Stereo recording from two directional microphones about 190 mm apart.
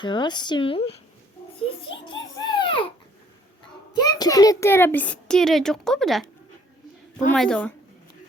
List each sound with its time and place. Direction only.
0.0 s speech: 25° left (ahead or behind)
2.4 s a sound: 25° left (ahead or behind)
3.9 s a child's voice: 20° left (ahead or behind); by 6.2 s centre (ahead or behind)
7.3 s a woman's voice: 5° left (ahead or behind)